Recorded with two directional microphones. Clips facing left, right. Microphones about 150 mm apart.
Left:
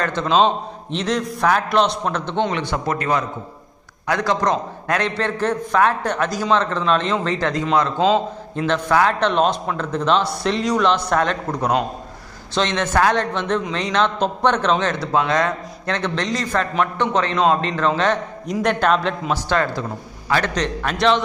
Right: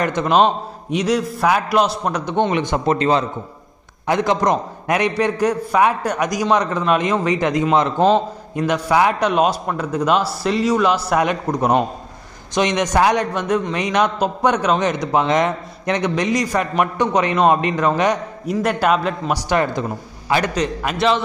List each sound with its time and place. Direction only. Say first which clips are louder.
0.0 s a man's voice: right 2 dB; 15° right (ahead or behind)
2.9 s a man's voice: right 5 dB; 25° right (ahead or behind); by 21.2 s 5° right (ahead or behind)